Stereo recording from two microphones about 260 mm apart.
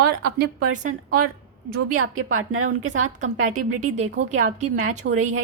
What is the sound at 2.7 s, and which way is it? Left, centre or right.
A woman's voice, right.